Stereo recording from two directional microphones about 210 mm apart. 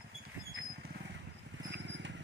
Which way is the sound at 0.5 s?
50° right (ahead or behind).